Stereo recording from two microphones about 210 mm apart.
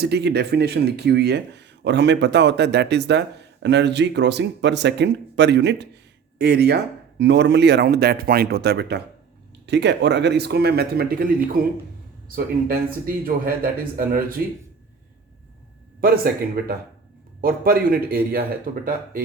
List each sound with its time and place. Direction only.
0.0 s speech: 55° right (ahead or behind)
16.0 s speech: 45° right (ahead or behind)